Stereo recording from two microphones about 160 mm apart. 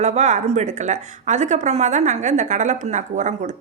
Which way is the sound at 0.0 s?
45° right (ahead or behind).